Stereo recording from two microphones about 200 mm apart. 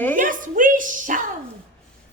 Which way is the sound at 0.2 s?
40° right (ahead or behind).